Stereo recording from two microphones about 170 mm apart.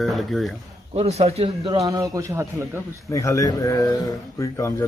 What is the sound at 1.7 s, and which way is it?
A man's voice, 20° right (ahead or behind).